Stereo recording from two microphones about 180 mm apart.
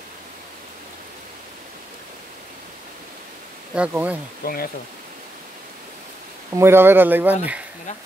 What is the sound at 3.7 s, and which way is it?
Speech, 5° right (ahead or behind).